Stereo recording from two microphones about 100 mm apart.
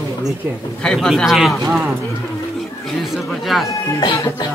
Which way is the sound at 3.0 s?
Centre (ahead or behind).